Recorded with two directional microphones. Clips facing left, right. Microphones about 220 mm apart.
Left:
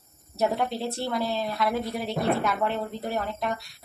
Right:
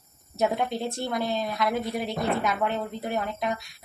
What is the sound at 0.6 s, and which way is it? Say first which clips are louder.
Speech: even; 20° right (ahead or behind).